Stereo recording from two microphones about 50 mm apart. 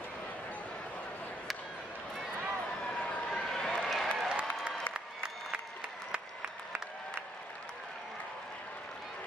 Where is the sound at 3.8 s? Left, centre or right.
Centre.